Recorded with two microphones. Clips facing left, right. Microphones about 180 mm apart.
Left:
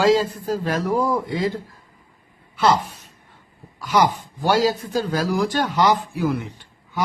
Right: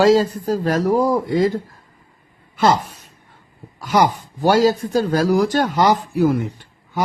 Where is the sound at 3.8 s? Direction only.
45° right (ahead or behind).